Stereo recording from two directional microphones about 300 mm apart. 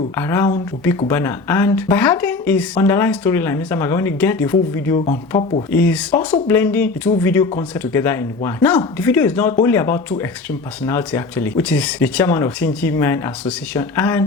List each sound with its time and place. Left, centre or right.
0.2 s speech: centre